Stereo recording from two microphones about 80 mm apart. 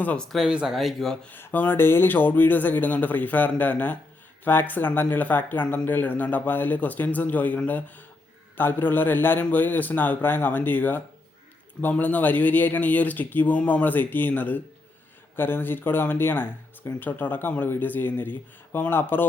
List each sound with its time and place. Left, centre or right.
0.0 s speech: centre
0.3 s speech: centre
1.3 s speech: left